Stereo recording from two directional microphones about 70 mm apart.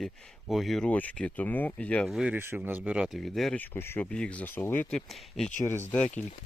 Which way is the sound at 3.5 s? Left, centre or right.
Left.